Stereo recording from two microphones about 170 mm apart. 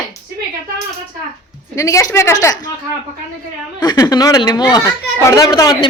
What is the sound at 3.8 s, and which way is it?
Speech, 25° left (ahead or behind).